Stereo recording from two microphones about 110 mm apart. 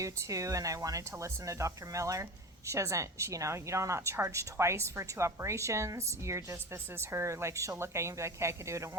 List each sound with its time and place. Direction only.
0.0 s a woman's voice: 30° right (ahead or behind)